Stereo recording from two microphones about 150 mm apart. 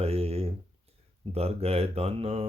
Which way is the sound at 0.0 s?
45° right (ahead or behind).